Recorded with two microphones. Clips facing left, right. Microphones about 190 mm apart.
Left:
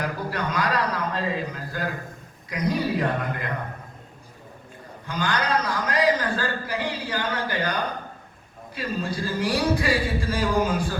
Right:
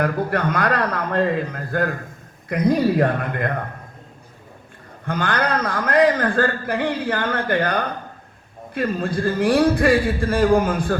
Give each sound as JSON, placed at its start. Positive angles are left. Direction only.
{"t": 0.0, "sound": "a man's voice", "side_deg": -55}
{"t": 5.0, "sound": "a man's voice", "side_deg": -55}